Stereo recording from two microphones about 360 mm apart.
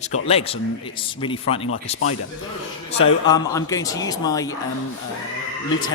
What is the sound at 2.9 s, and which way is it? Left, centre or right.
Speech, centre.